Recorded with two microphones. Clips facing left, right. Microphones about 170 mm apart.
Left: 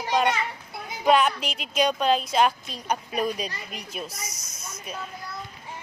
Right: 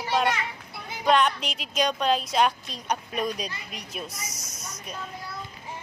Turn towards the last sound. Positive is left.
turn(degrees=0)  # may be behind; listen again after turning